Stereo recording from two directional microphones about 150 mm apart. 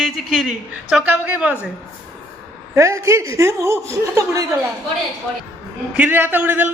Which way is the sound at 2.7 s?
20° right (ahead or behind).